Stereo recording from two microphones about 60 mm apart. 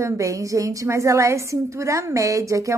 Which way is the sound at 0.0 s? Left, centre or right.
Right.